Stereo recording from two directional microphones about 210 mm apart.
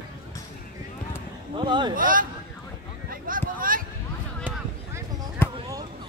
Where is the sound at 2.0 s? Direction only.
40° right (ahead or behind).